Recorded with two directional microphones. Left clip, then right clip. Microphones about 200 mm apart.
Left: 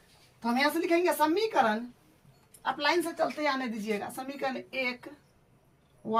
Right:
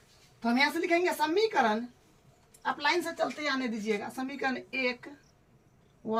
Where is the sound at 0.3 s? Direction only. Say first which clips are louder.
Even; 15° left (ahead or behind).